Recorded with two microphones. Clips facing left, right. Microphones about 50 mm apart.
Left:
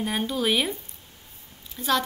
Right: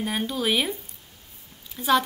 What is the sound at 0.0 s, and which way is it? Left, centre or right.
Speech, centre.